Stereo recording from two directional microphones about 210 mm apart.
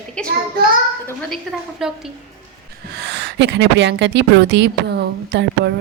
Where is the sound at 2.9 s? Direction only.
55° right (ahead or behind).